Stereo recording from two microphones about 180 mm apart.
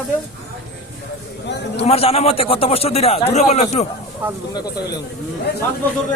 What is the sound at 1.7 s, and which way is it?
A man's voice, 35° left (ahead or behind).